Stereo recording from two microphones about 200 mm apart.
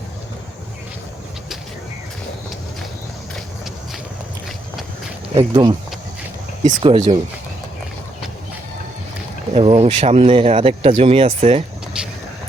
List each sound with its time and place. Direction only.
5.3 s speech: 25° right (ahead or behind)
6.8 s speech: 25° right (ahead or behind)
9.6 s speech: 30° right (ahead or behind)
11.9 s vehicle: 5° right (ahead or behind)